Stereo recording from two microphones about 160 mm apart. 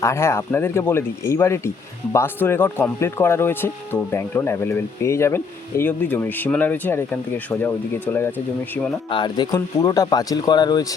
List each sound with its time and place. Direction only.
0.0 s speech: 15° left (ahead or behind)
9.0 s speech: 30° left (ahead or behind)